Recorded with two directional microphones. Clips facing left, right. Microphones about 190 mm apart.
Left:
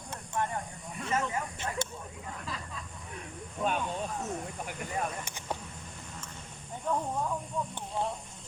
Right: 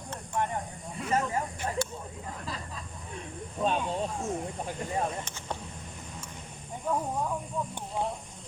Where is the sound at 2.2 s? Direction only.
35° right (ahead or behind).